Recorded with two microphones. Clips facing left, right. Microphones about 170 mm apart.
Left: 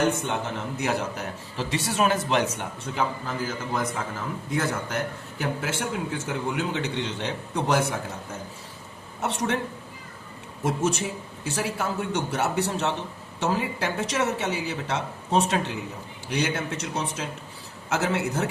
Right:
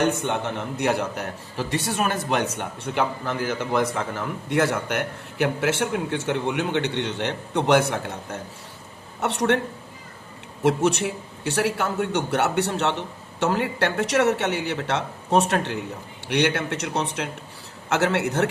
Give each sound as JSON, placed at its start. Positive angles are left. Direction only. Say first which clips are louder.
{"t": 0.3, "sound": "a man's voice", "louder": "right 3 dB", "side_deg": -60}
{"t": 10.8, "sound": "a man's voice", "louder": "right 4 dB", "side_deg": -70}